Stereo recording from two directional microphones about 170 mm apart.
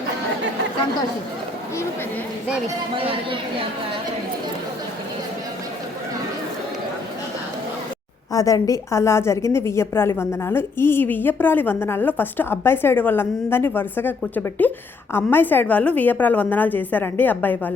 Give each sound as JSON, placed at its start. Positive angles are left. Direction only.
{"t": 2.9, "sound": "speech", "side_deg": -30}
{"t": 8.3, "sound": "a woman's voice", "side_deg": 20}